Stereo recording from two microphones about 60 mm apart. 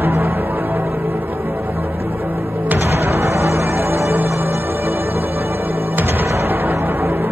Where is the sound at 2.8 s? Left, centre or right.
Right.